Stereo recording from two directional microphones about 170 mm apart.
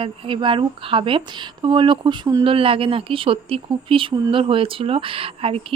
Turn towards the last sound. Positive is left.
turn(degrees=-35)  # may be behind; listen again after turning